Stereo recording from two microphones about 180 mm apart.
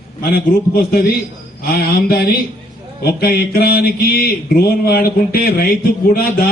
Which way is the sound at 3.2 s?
60° left (ahead or behind).